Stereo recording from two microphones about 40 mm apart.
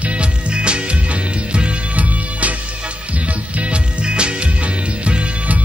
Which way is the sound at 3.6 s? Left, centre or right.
Right.